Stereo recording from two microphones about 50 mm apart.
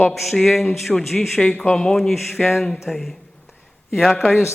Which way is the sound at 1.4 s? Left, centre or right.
Left.